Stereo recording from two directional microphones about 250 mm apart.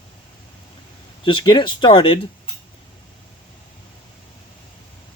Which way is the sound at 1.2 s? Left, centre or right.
Centre.